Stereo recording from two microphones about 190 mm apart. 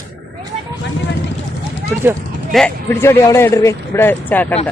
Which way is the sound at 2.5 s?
Centre (ahead or behind).